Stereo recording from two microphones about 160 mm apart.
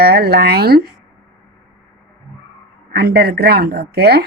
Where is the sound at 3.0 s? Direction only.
80° right.